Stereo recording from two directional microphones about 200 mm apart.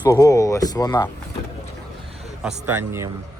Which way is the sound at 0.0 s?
15° left (ahead or behind).